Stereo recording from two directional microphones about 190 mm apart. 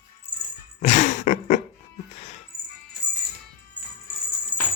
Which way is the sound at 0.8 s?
40° left (ahead or behind).